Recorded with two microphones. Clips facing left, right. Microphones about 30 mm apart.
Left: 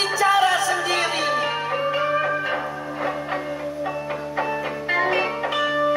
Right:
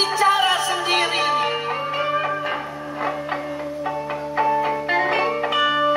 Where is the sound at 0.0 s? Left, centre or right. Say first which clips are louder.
Right 1 dB; right.